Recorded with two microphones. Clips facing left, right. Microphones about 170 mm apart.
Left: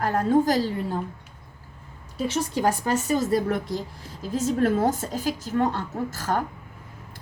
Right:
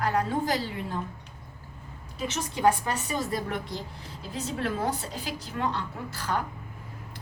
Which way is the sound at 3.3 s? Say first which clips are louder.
Left 8 dB; 40° left (ahead or behind).